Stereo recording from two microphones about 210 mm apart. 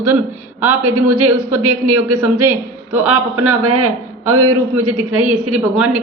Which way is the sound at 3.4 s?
90° right.